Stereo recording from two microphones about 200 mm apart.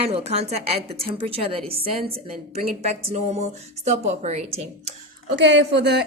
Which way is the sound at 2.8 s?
30° right (ahead or behind).